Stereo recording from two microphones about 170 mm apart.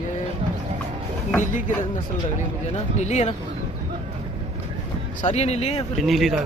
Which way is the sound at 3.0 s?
40° left (ahead or behind).